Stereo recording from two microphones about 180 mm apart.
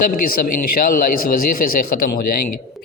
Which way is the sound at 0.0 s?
50° left (ahead or behind).